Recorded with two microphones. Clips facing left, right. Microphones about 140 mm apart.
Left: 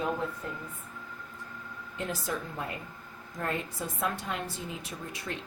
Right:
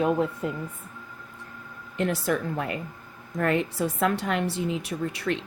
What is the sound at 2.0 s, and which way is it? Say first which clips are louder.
Speech: right 9 dB; 70° right (ahead or behind).